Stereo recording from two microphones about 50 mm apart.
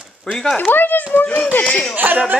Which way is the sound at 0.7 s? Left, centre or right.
Left.